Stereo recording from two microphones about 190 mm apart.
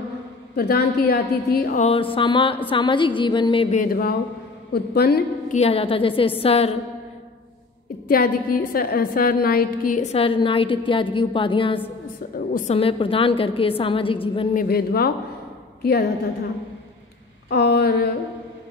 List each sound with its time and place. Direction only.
0.6 s a woman's voice: 55° left (ahead or behind)
1.8 s a woman's voice: 30° left (ahead or behind)
3.7 s a woman's voice: 50° left (ahead or behind)
5.5 s a woman's voice: 30° left (ahead or behind)
8.1 s a woman's voice: 50° left (ahead or behind)
10.1 s a woman's voice: 30° left (ahead or behind)
14.5 s a woman's voice: 50° left (ahead or behind)
17.5 s a woman's voice: 55° left (ahead or behind)